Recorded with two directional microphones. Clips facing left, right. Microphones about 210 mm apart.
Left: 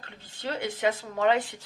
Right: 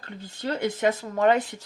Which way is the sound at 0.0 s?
40° right (ahead or behind).